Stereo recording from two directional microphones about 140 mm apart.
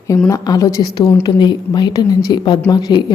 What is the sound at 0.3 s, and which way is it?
A woman's voice, 25° left (ahead or behind).